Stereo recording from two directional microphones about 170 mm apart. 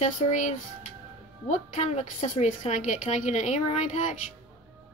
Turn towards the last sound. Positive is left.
turn(degrees=45)  # may be behind; listen again after turning